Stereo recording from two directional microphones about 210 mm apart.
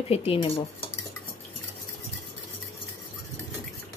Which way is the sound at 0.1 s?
25° left (ahead or behind).